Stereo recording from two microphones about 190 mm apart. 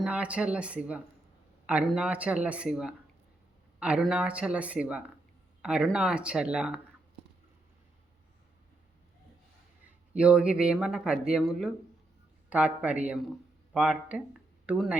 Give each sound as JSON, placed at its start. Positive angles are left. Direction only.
{"t": 0.0, "sound": "speech", "side_deg": -5}
{"t": 10.2, "sound": "speech", "side_deg": -5}